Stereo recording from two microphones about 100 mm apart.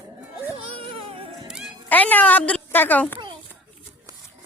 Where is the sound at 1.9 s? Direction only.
15° left (ahead or behind).